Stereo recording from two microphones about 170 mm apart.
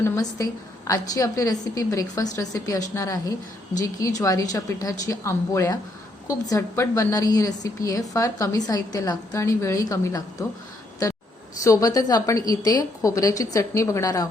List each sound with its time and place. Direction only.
0.0 s a woman's voice: 20° left (ahead or behind)
11.6 s a woman's voice: 20° left (ahead or behind)